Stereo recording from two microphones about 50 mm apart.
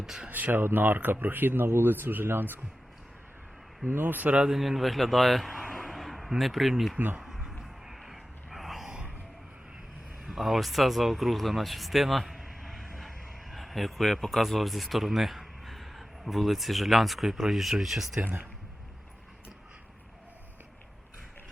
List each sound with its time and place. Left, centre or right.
0.0 s speech: centre
0.3 s speech: right
3.9 s speech: right
4.4 s a man's voice: centre
5.7 s a sound: centre
7.2 s music: centre
7.6 s a sound: centre
8.9 s a sound: right
10.2 s speech: centre